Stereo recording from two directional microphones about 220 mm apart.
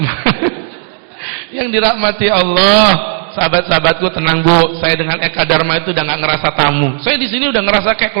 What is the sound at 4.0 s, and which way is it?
Speech, 20° right (ahead or behind).